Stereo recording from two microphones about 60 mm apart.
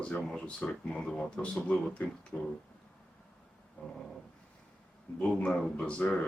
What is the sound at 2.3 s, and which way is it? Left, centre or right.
Speech, left.